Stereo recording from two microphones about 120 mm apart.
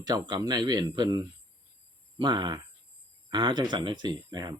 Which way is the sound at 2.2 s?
35° right (ahead or behind).